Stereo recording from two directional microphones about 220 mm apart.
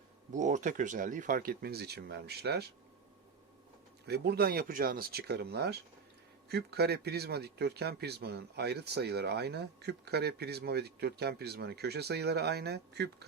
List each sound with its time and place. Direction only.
0.3 s speech: 35° right (ahead or behind)
4.0 s a man's voice: 50° right (ahead or behind)